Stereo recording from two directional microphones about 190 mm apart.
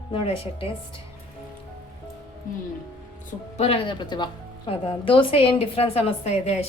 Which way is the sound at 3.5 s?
30° left (ahead or behind).